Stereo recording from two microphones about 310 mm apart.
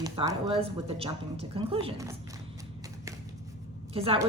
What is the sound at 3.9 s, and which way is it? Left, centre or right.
Speech, centre.